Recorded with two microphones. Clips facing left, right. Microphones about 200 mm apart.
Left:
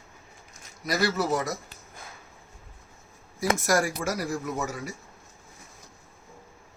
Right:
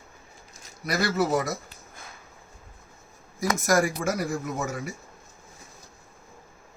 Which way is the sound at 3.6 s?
50° right (ahead or behind).